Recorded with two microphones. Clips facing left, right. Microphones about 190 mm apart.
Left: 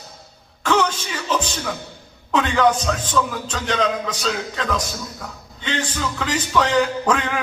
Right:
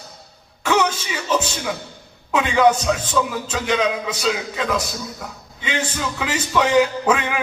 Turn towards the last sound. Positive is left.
turn(degrees=-5)  # may be behind; listen again after turning